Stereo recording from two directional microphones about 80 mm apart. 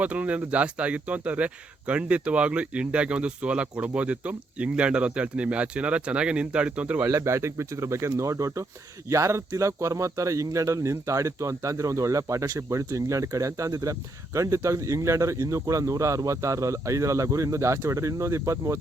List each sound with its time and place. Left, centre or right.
0.0 s speech: centre
7.1 s speech: right